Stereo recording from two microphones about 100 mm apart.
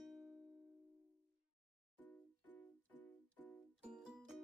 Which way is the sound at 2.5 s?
15° left (ahead or behind).